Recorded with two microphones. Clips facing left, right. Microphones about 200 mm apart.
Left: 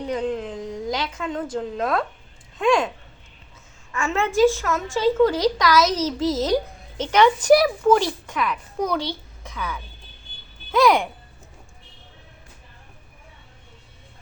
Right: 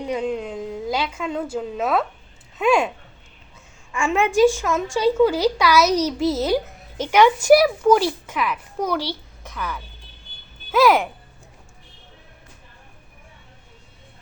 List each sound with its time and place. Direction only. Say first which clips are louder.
0.0 s a woman's voice: right 1 dB; 10° right (ahead or behind)
3.9 s a woman's voice: right 3 dB; 15° right (ahead or behind)